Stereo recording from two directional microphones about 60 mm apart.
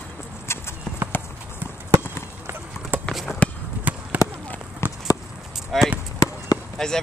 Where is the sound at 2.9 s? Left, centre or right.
Right.